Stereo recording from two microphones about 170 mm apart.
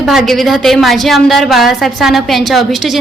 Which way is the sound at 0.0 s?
Centre (ahead or behind).